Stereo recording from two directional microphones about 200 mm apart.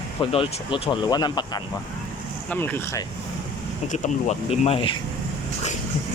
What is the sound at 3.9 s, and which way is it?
Speech, 35° left (ahead or behind).